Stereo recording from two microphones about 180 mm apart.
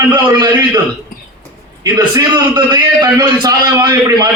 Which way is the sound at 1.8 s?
20° right (ahead or behind).